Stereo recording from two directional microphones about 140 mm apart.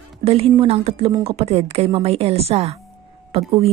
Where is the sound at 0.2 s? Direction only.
45° right (ahead or behind).